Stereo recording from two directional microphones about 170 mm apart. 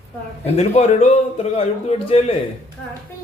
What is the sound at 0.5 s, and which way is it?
A man's voice, 40° left (ahead or behind).